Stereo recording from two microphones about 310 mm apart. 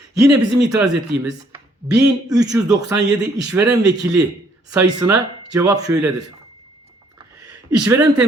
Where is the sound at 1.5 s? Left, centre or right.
Centre.